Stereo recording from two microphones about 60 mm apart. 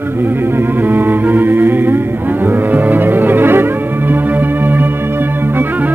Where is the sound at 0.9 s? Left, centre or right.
Right.